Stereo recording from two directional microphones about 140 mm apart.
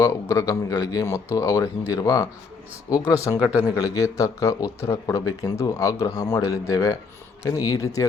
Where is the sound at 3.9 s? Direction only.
20° left (ahead or behind).